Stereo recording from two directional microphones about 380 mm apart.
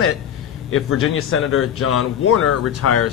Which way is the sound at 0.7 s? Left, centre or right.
Left.